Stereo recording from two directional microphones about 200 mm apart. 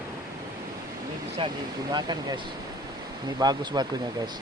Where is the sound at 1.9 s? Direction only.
20° right (ahead or behind).